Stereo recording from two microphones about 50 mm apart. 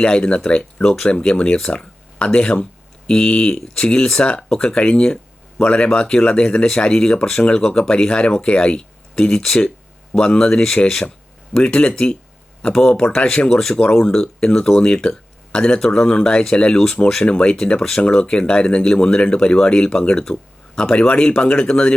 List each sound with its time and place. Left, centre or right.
0.0 s speech: centre